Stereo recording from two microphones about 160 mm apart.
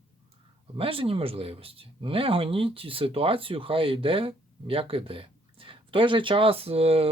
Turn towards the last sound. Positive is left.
turn(degrees=-40)  # may be behind; listen again after turning